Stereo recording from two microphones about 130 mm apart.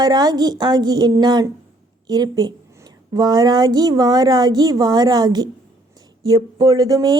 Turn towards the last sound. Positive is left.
turn(degrees=-30)  # may be behind; listen again after turning